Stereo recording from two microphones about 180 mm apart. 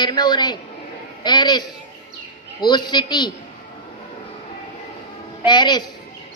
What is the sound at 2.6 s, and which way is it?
Speech, 25° left (ahead or behind).